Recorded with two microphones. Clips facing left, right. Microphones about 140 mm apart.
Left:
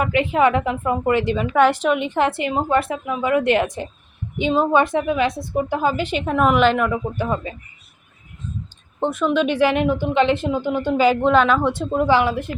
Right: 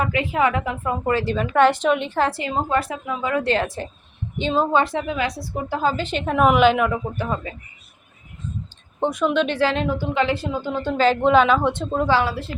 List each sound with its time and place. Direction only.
0.1 s a woman's voice: 25° left (ahead or behind)
6.3 s speech: 5° right (ahead or behind)
7.2 s a woman's voice: 20° left (ahead or behind)
9.0 s a woman's voice: centre (ahead or behind)
11.2 s speech: centre (ahead or behind)
12.1 s a woman's voice: 20° left (ahead or behind)